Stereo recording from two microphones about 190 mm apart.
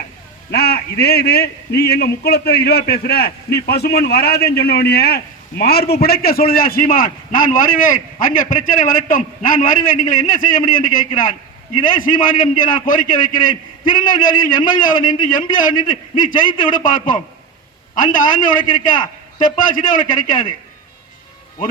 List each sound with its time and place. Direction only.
0.5 s a man's voice: 55° left (ahead or behind)